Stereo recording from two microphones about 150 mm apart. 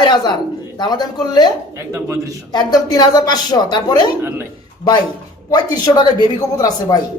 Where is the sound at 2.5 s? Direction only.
30° left (ahead or behind).